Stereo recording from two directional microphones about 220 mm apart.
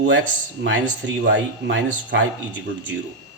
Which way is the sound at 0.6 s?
55° right (ahead or behind).